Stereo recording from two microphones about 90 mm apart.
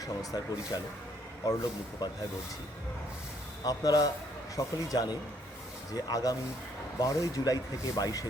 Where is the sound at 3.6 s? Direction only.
45° left (ahead or behind).